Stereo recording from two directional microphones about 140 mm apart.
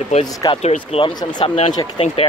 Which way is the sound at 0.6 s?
45° left (ahead or behind).